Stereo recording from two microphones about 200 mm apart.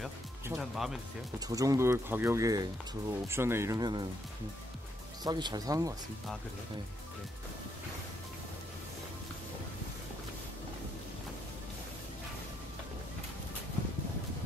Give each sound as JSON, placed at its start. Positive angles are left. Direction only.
{"t": 0.6, "sound": "speech", "side_deg": 0}
{"t": 1.5, "sound": "speech", "side_deg": -15}
{"t": 5.2, "sound": "speech", "side_deg": -20}